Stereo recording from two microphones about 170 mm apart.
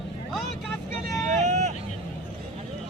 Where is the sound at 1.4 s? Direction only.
45° right (ahead or behind).